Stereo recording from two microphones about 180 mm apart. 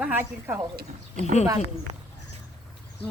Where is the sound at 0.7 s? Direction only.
60° right (ahead or behind).